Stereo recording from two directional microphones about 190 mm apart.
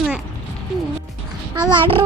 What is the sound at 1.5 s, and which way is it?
Speech, 25° right (ahead or behind).